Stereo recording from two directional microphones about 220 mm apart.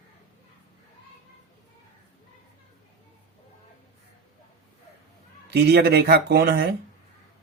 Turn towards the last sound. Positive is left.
turn(degrees=-45)  # may be behind; listen again after turning